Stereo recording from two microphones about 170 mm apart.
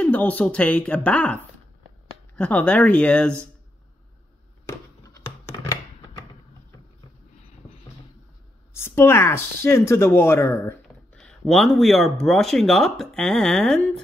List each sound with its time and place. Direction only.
0.0 s speech: 10° left (ahead or behind)
4.6 s a sound: 15° left (ahead or behind)
8.7 s speech: 15° left (ahead or behind)
11.1 s speech: centre (ahead or behind)